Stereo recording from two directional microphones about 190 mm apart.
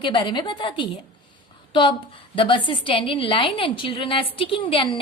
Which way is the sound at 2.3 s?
25° left (ahead or behind).